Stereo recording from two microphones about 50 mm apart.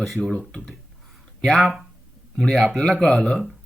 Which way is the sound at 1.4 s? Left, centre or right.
Centre.